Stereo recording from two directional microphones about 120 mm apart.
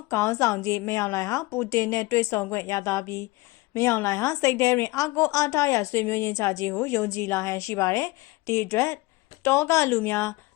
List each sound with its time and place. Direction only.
0.1 s a woman's voice: 25° left (ahead or behind)